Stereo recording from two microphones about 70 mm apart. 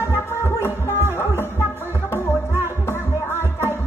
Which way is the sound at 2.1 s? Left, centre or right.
Left.